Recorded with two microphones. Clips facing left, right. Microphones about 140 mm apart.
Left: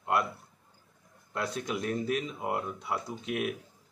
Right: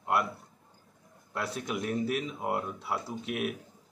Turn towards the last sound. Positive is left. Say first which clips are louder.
# even
turn(degrees=-5)  # may be behind; listen again after turning